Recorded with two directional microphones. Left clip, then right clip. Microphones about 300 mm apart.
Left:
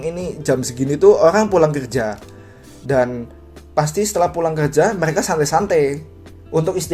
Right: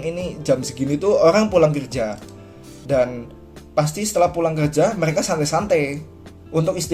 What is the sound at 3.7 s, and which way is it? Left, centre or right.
Speech, centre.